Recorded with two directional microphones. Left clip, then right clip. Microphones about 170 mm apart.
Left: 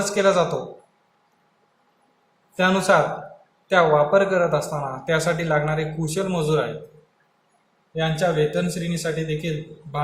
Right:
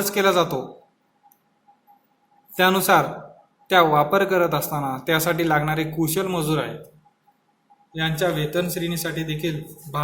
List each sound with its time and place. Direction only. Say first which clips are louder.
0.0 s a man's voice: even; 70° right (ahead or behind)
2.6 s a man's voice: right 1 dB; 70° right (ahead or behind)
7.9 s speech: left 2 dB; 65° right (ahead or behind)